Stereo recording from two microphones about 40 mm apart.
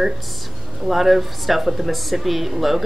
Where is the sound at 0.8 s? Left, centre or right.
Centre.